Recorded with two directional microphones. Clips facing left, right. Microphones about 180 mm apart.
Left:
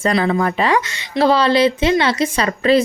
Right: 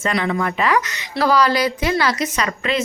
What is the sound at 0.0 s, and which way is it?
A woman's voice, 35° left (ahead or behind).